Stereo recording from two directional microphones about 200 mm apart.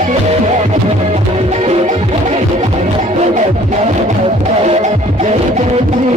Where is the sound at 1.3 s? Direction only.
30° right (ahead or behind).